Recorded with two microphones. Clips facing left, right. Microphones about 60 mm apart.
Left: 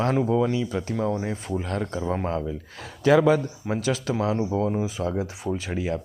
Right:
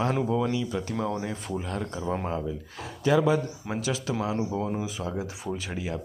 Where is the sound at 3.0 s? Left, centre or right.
Left.